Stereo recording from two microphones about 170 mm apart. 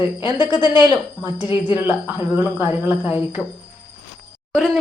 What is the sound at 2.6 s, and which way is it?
Speech, 10° right (ahead or behind).